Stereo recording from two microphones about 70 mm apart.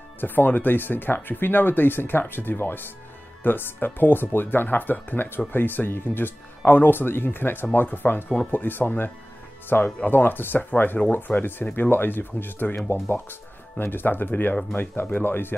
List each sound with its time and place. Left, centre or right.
0.2 s speech: left